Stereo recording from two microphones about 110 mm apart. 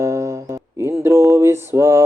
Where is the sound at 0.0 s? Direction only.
25° right (ahead or behind).